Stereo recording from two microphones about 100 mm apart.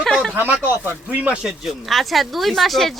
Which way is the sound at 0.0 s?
Centre (ahead or behind).